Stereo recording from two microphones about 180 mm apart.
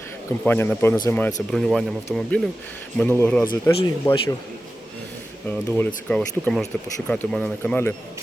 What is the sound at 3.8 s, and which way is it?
Speech, 20° left (ahead or behind).